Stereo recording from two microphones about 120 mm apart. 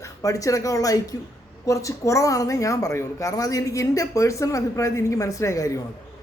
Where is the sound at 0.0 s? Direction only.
30° left (ahead or behind).